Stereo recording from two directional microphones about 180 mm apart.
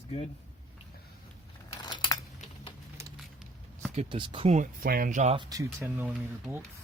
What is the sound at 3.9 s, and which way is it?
Speech, 30° right (ahead or behind).